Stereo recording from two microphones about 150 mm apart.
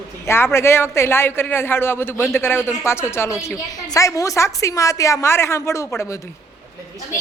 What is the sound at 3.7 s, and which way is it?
A woman's voice, 25° left (ahead or behind).